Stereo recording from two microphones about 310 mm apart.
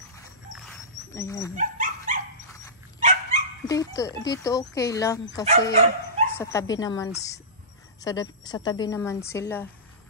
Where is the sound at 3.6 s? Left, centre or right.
Centre.